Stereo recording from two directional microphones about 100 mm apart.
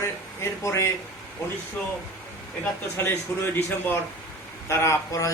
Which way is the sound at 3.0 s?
25° left (ahead or behind).